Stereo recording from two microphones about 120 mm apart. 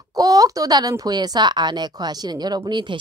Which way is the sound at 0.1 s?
30° right (ahead or behind).